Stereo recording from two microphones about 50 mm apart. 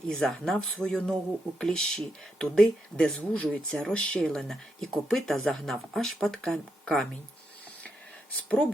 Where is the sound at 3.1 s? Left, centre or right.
Left.